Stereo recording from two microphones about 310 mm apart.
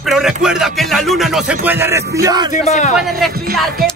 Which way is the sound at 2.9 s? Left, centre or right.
Centre.